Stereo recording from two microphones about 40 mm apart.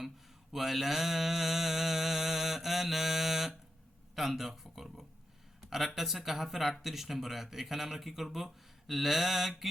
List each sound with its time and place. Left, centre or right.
0.5 s mantra: centre
4.1 s speech: centre